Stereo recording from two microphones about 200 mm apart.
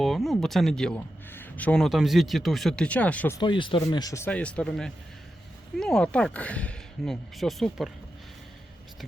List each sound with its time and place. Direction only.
0.0 s a man's voice: centre (ahead or behind)
3.4 s a man's voice: 25° left (ahead or behind); by 7.9 s centre (ahead or behind)